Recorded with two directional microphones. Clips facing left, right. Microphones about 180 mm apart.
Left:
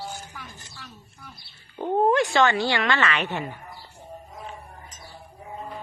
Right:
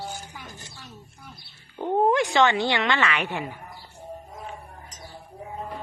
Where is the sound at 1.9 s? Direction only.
15° right (ahead or behind).